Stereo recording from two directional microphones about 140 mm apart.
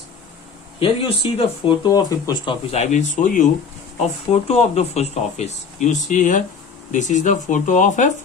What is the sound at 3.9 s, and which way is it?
Speech, 50° left (ahead or behind).